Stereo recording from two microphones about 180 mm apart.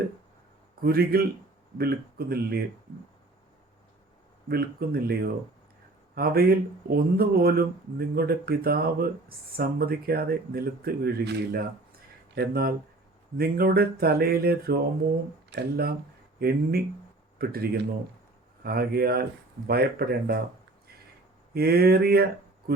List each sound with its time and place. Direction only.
0.8 s speech: 55° right (ahead or behind)
4.4 s speech: 60° right (ahead or behind)
21.5 s speech: 60° right (ahead or behind)